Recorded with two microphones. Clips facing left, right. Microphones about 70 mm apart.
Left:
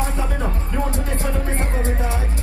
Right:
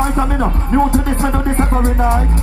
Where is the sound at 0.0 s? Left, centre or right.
Right.